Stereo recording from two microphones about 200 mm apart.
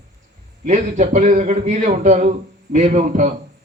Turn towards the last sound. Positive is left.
turn(degrees=-35)  # may be behind; listen again after turning